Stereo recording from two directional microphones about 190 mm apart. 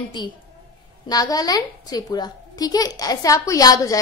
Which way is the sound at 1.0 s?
20° left (ahead or behind).